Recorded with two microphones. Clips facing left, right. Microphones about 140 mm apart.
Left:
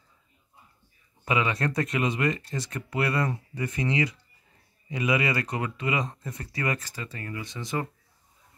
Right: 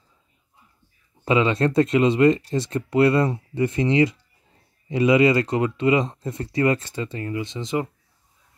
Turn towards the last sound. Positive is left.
turn(degrees=-20)  # may be behind; listen again after turning